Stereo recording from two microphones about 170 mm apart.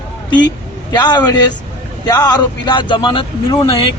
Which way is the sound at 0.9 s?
25° left (ahead or behind).